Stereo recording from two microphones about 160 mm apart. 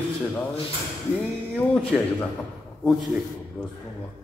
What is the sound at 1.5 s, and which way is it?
Speech, 5° left (ahead or behind).